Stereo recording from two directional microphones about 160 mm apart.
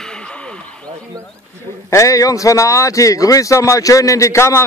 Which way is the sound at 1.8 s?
20° left (ahead or behind).